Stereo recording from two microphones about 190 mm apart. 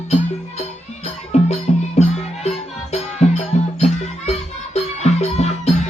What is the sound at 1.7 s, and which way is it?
Music, 35° left (ahead or behind).